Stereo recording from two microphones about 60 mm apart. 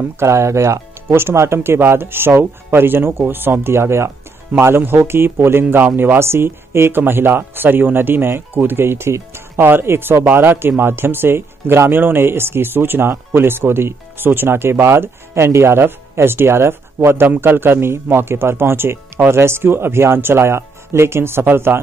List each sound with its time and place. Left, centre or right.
0.2 s speech: right